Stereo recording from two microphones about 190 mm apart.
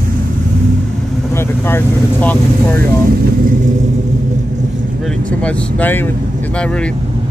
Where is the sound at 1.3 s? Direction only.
10° left (ahead or behind).